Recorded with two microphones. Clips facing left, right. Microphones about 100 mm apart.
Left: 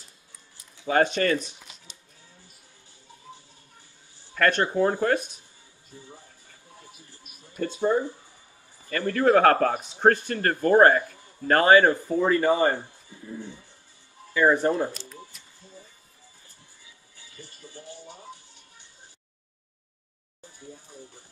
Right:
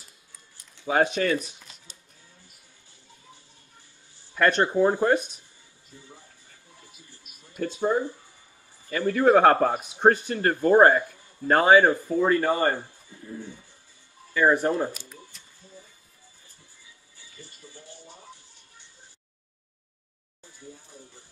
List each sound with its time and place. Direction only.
0.8 s speech: 5° right (ahead or behind)
4.4 s speech: 15° right (ahead or behind)
7.6 s speech: centre (ahead or behind)